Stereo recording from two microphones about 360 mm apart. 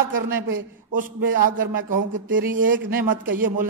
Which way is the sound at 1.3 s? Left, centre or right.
Right.